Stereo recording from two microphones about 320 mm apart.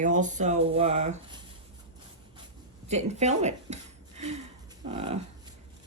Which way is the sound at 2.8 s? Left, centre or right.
Right.